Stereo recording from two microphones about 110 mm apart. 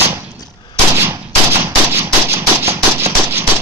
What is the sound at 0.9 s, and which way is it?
Gunshot, 20° right (ahead or behind).